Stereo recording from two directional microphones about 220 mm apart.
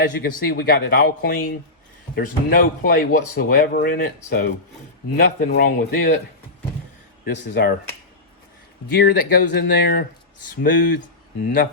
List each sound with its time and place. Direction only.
0.2 s speech: 40° left (ahead or behind)
7.3 s speech: 45° left (ahead or behind)
9.0 s speech: 40° left (ahead or behind)